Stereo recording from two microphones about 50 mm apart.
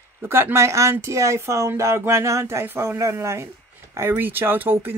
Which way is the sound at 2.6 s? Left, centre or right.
Right.